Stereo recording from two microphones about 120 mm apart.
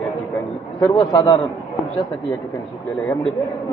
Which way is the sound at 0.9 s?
35° left (ahead or behind).